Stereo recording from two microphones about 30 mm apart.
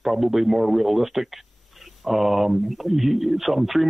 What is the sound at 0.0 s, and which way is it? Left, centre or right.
Speech, centre.